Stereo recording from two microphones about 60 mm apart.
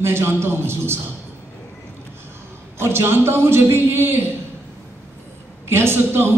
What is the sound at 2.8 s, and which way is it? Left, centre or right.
A man's voice, right.